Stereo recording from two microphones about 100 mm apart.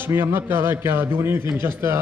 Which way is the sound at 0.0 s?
20° right (ahead or behind).